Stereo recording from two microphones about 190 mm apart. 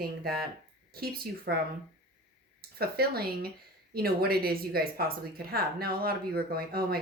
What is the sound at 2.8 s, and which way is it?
A woman's voice, 55° right (ahead or behind).